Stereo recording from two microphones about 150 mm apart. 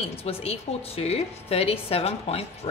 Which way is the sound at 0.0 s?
40° left (ahead or behind).